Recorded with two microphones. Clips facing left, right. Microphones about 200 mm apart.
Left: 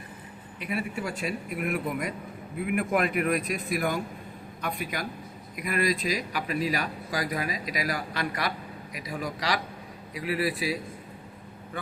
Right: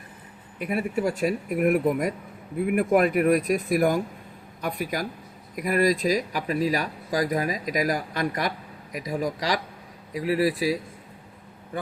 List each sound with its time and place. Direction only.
0.6 s speech: 45° right (ahead or behind)